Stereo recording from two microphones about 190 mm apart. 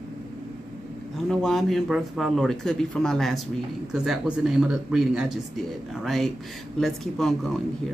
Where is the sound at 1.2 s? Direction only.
Centre (ahead or behind).